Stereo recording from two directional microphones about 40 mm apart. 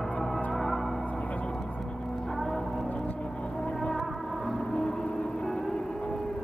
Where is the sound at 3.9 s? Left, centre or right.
Centre.